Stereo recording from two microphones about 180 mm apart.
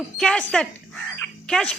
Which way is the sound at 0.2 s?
5° left (ahead or behind).